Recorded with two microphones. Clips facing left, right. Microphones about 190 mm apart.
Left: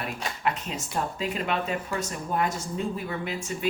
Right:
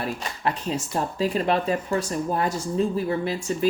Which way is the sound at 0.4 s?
35° right (ahead or behind).